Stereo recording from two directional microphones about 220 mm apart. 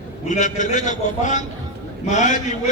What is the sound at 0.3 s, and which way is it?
A man's voice, 35° left (ahead or behind).